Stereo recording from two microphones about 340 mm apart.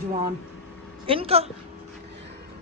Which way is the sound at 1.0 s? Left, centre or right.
Centre.